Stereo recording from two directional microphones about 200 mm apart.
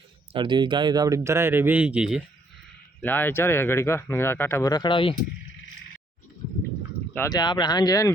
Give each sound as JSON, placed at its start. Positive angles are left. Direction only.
{"t": 0.3, "sound": "speech", "side_deg": -25}
{"t": 3.0, "sound": "speech", "side_deg": 10}
{"t": 7.1, "sound": "speech", "side_deg": 15}